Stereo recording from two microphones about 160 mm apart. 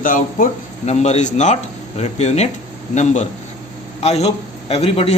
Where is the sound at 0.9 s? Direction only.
45° left (ahead or behind).